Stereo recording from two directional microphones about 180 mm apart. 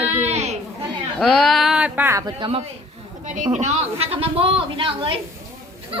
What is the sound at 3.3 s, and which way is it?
Speech, 45° right (ahead or behind).